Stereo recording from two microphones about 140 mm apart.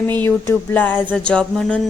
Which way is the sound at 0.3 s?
15° left (ahead or behind).